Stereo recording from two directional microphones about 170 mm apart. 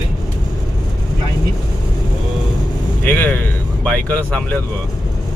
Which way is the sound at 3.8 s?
10° left (ahead or behind).